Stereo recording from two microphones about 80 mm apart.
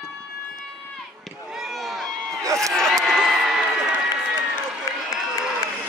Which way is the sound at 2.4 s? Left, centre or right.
Right.